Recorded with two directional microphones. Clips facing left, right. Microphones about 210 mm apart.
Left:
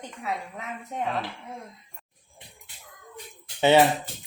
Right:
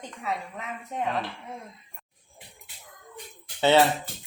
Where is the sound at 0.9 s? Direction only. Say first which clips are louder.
Even; centre (ahead or behind).